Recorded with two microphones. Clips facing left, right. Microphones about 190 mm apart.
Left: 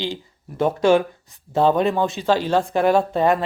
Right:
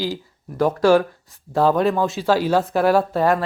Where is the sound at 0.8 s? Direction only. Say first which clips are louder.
Right 1 dB; 20° left (ahead or behind).